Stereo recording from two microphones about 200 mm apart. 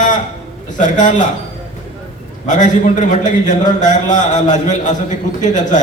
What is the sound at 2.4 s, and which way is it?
A man's voice, 40° left (ahead or behind).